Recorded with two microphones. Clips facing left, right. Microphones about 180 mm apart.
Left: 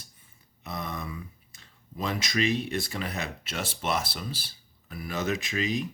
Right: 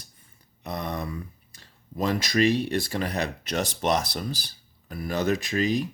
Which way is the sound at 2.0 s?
50° right (ahead or behind).